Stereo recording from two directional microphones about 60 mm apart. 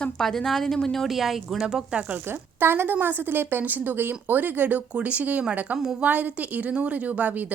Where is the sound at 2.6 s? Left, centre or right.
Right.